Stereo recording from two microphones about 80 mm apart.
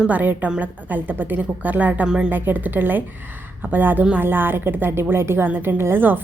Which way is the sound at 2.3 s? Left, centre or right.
Right.